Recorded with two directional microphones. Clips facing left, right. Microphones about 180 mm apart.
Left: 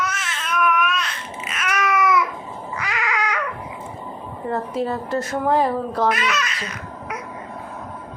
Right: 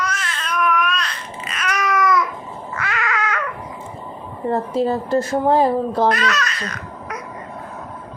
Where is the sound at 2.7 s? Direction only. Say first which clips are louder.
Right 1 dB; 15° left (ahead or behind).